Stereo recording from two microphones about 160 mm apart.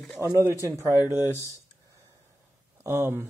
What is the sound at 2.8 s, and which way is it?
Speech, 15° right (ahead or behind).